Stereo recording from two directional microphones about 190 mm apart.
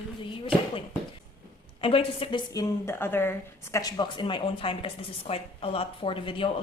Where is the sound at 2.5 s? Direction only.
15° left (ahead or behind).